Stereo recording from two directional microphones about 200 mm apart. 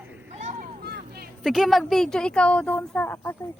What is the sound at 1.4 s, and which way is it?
Speech, centre (ahead or behind).